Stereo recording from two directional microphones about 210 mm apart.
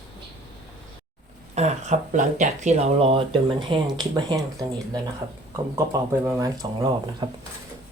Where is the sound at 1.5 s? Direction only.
35° right (ahead or behind).